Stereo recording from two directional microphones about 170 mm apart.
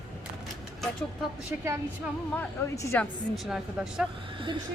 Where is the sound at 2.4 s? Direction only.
15° left (ahead or behind).